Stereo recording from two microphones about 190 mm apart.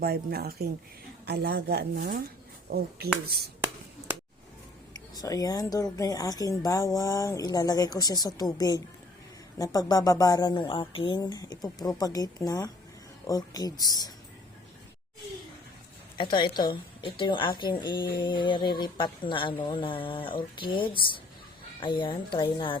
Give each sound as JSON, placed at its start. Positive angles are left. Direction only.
{"t": 0.0, "sound": "a woman's voice", "side_deg": -55}
{"t": 4.9, "sound": "speech", "side_deg": 20}
{"t": 16.1, "sound": "speech", "side_deg": 25}